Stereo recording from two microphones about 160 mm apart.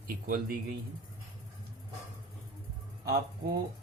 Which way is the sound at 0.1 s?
65° right (ahead or behind).